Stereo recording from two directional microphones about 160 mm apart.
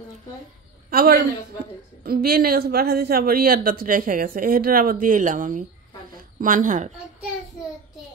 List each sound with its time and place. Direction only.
0.8 s a man's voice: 70° right (ahead or behind); by 6.9 s 50° right (ahead or behind)